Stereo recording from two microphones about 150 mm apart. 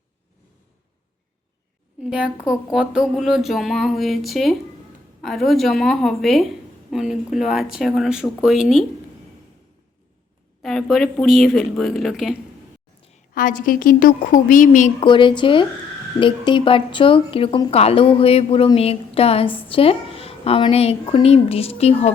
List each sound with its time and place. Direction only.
2.0 s a woman's voice: 5° right (ahead or behind)
10.6 s speech: centre (ahead or behind)
13.3 s a woman's voice: 65° left (ahead or behind)
15.0 s speech: 35° left (ahead or behind)